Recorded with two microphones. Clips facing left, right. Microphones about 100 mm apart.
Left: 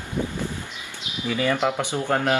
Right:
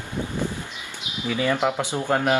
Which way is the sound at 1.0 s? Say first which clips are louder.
Even; 20° right (ahead or behind).